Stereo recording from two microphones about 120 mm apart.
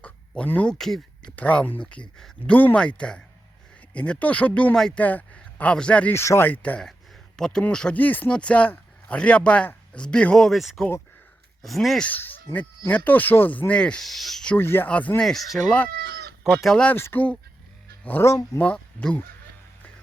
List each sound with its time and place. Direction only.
0.0 s speech: 10° left (ahead or behind)
12.0 s speech: 15° left (ahead or behind)
14.5 s speech: 20° left (ahead or behind)
16.6 s speech: 5° left (ahead or behind)